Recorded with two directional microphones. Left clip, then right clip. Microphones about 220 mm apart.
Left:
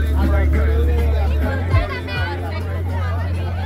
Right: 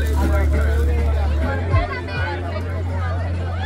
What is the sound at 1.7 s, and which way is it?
Music, 30° left (ahead or behind).